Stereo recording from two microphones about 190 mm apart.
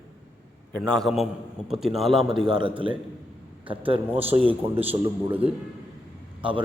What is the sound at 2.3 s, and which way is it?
A man's voice, 25° right (ahead or behind).